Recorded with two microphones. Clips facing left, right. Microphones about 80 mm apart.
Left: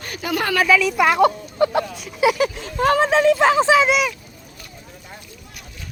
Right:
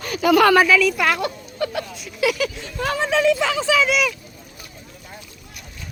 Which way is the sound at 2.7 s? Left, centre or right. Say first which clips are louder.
Left 5 dB; left.